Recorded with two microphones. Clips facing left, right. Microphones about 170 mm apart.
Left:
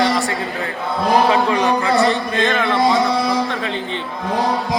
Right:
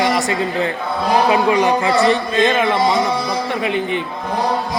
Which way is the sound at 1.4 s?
15° right (ahead or behind).